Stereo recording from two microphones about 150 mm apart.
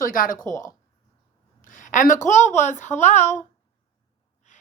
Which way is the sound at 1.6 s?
60° left (ahead or behind).